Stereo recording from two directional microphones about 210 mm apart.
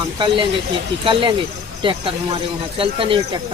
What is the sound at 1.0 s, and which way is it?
Speech, 25° right (ahead or behind).